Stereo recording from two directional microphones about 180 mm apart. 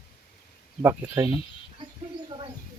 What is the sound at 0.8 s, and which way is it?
Speech, 15° right (ahead or behind).